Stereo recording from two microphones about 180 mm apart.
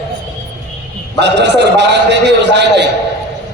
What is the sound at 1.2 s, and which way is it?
A man's voice, 75° right (ahead or behind).